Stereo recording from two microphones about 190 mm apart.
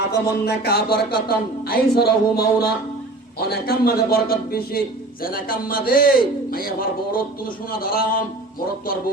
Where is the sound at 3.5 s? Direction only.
55° left (ahead or behind).